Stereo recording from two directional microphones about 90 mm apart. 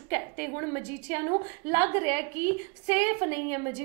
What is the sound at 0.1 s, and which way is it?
A woman's voice, 25° right (ahead or behind).